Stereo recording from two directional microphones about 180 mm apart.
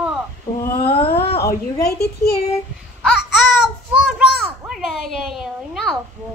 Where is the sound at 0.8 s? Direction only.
30° left (ahead or behind).